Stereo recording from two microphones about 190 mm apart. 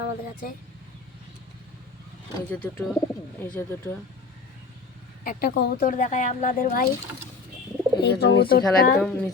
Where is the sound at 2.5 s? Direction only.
10° left (ahead or behind).